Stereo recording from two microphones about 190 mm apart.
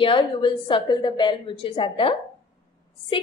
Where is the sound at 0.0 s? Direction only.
25° left (ahead or behind).